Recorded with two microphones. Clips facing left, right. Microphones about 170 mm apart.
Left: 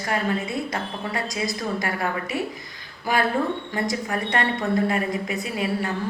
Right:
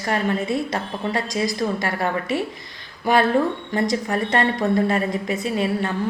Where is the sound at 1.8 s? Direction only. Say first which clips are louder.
Right 3 dB; 25° right (ahead or behind).